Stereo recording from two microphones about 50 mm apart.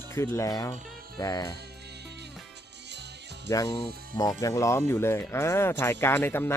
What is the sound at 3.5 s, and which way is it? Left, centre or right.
Speech, left.